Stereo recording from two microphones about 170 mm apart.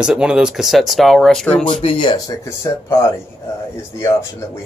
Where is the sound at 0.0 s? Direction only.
5° right (ahead or behind).